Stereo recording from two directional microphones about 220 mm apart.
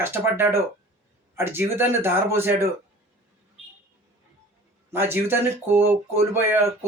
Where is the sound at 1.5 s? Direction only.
10° right (ahead or behind).